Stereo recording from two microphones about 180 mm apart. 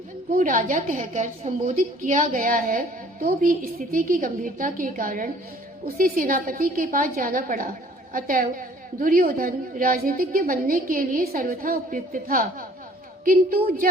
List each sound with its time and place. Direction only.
0.3 s a woman's voice: 45° right (ahead or behind)